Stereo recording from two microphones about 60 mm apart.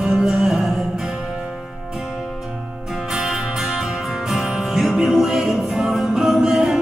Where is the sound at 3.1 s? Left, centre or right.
Centre.